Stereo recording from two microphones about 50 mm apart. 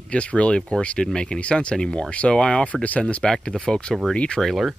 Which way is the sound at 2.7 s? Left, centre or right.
Left.